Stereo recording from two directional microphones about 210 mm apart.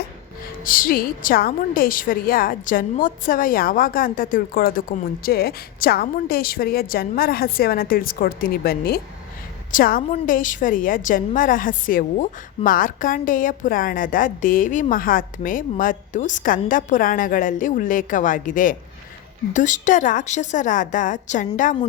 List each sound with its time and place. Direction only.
0.6 s a woman's voice: 40° left (ahead or behind)